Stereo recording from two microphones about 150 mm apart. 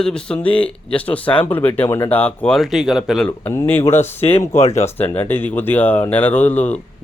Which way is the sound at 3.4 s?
15° left (ahead or behind).